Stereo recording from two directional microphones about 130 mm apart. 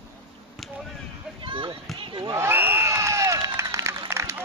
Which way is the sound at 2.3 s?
20° right (ahead or behind).